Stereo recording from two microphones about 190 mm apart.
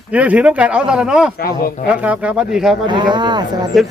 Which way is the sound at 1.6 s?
50° left (ahead or behind).